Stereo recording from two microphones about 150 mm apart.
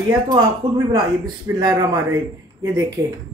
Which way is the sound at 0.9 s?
30° right (ahead or behind).